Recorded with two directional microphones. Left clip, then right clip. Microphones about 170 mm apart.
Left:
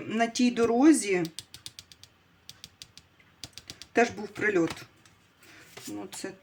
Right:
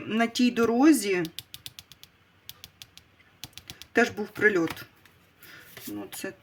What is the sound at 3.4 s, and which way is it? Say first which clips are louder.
Typing: right 1 dB; 25° right (ahead or behind).